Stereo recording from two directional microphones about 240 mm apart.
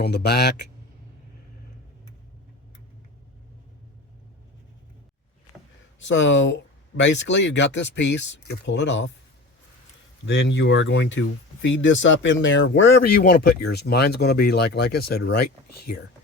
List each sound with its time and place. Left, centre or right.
0.0 s speech: left
6.1 s speech: left
10.2 s speech: left